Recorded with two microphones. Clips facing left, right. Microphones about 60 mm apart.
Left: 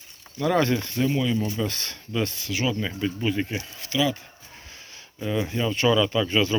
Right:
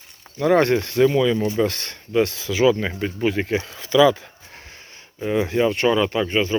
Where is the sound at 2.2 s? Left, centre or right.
Right.